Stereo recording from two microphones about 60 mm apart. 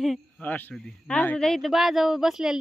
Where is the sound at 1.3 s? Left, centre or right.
Centre.